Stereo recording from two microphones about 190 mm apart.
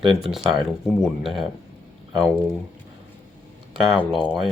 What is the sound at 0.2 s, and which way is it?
Speech, centre (ahead or behind).